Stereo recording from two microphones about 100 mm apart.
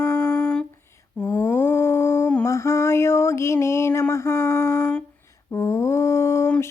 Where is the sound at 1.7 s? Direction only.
30° left (ahead or behind).